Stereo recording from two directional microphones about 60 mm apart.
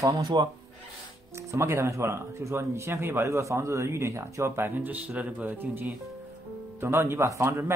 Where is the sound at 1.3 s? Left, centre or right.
Right.